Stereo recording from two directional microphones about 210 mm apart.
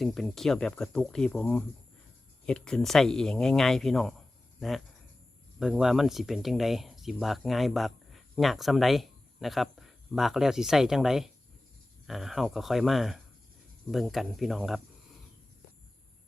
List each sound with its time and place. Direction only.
0.0 s speech: centre (ahead or behind)
5.5 s speech: 5° right (ahead or behind)